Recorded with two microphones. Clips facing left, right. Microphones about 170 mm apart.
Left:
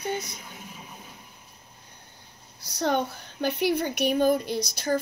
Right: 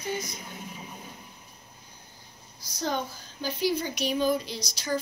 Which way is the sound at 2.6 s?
65° left (ahead or behind).